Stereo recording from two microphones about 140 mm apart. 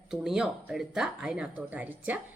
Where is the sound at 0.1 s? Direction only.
5° right (ahead or behind).